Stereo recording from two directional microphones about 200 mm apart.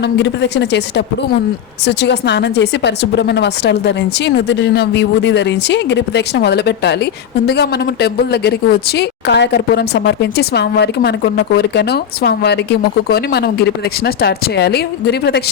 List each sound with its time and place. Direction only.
0.0 s a woman's voice: 60° left (ahead or behind)